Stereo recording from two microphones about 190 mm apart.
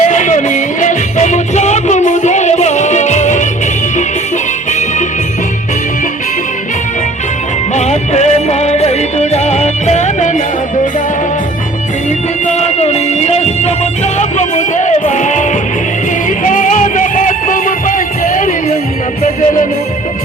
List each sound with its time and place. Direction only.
0.0 s music: 40° left (ahead or behind)
7.8 s music: 35° left (ahead or behind)
12.5 s music: 35° left (ahead or behind)